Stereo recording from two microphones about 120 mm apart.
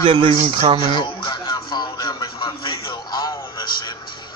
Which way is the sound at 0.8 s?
40° left (ahead or behind).